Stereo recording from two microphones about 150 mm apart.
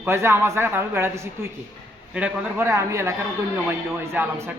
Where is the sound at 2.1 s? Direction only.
10° right (ahead or behind).